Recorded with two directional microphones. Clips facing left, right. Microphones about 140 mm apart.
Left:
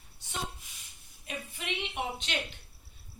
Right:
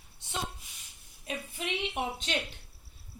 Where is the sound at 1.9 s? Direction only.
40° right (ahead or behind).